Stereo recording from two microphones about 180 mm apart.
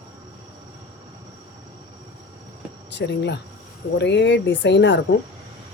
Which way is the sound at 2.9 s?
75° left (ahead or behind).